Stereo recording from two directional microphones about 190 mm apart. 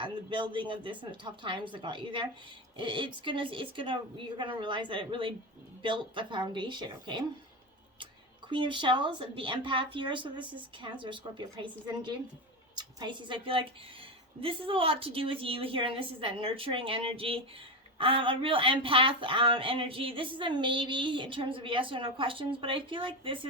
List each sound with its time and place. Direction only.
0.0 s speech: 25° right (ahead or behind)
8.4 s a woman's voice: 25° right (ahead or behind)